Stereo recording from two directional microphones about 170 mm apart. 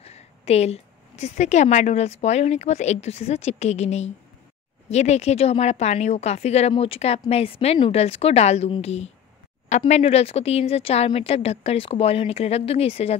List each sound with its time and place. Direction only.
0.0 s a woman's voice: 40° left (ahead or behind)